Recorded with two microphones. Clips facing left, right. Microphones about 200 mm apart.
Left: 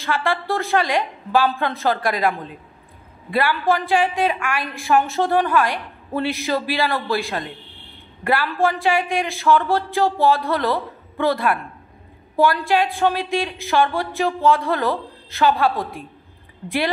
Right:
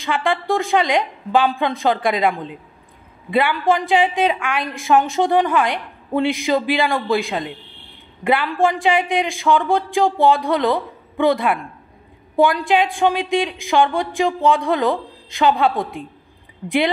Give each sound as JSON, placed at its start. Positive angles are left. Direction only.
{"t": 0.0, "sound": "a woman's voice", "side_deg": -20}